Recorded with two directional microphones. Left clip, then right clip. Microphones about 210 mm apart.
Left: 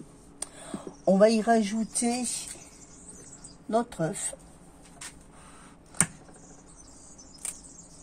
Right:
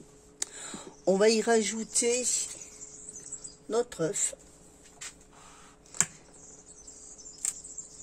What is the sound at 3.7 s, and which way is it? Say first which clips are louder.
Speech: left 1 dB; 55° right (ahead or behind).